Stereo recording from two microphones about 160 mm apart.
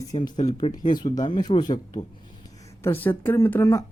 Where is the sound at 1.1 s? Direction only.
25° left (ahead or behind).